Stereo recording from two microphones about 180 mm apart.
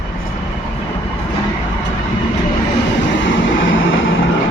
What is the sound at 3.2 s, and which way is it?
Vehicle, 90° left.